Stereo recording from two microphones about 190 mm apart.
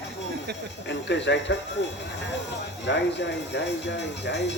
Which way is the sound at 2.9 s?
65° left (ahead or behind).